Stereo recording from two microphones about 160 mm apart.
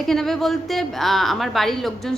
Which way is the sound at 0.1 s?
Centre (ahead or behind).